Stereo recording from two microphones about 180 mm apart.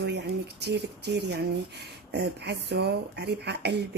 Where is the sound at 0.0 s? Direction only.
65° right (ahead or behind).